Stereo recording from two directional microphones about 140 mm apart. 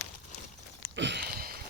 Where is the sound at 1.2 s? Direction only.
90° right.